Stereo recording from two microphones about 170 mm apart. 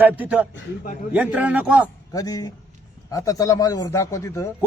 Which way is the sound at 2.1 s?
20° left (ahead or behind).